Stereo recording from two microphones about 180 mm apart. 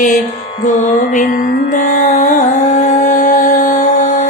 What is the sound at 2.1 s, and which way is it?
Music, 40° left (ahead or behind).